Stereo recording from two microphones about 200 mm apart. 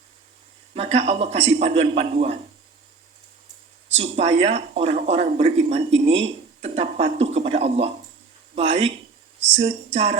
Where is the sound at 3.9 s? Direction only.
30° right (ahead or behind).